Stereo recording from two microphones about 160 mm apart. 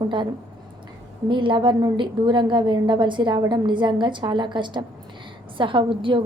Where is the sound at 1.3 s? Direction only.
30° right (ahead or behind).